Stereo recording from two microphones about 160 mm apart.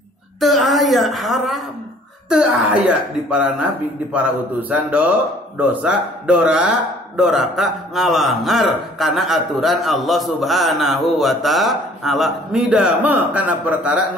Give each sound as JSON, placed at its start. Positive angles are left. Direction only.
{"t": 0.4, "sound": "a woman's voice", "side_deg": 0}